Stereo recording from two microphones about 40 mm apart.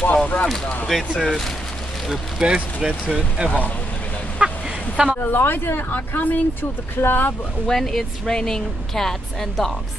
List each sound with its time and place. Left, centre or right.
0.1 s speech: left
0.9 s speech: centre
2.4 s speech: centre
3.4 s speech: left
4.4 s a sound: right
5.2 s speech: left
7.0 s speech: left
7.6 s speech: centre